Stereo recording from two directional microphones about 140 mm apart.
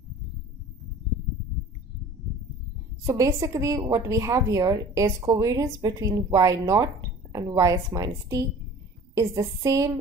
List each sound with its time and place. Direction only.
3.1 s a woman's voice: 25° right (ahead or behind)